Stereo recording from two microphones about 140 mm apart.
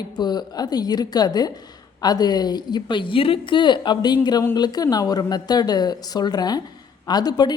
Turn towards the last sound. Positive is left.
turn(degrees=30)  # may be behind; listen again after turning